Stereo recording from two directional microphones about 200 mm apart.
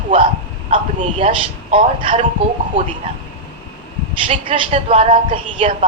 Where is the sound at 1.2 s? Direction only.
25° right (ahead or behind).